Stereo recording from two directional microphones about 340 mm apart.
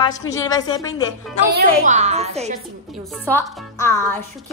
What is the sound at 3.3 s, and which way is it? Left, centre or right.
Music, centre.